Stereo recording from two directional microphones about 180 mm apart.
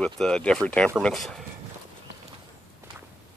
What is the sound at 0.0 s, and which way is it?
Speech, 5° left (ahead or behind).